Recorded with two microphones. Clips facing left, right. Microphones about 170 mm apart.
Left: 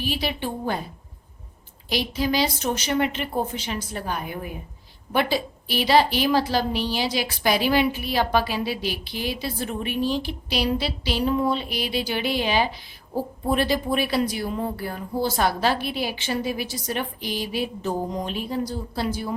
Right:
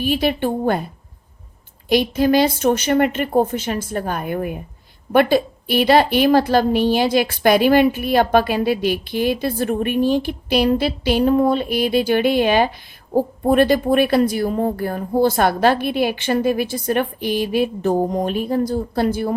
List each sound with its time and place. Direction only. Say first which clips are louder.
0.0 s a woman's voice: right 8 dB; 50° right (ahead or behind)
1.9 s a woman's voice: right 9 dB; 55° right (ahead or behind)